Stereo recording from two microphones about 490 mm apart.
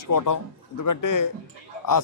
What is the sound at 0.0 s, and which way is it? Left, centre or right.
Speech, left.